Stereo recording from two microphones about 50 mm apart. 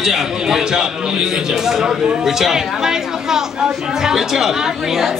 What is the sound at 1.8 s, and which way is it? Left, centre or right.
Chatter, centre.